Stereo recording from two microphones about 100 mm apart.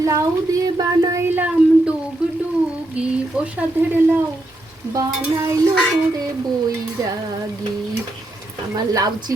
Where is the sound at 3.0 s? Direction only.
15° right (ahead or behind).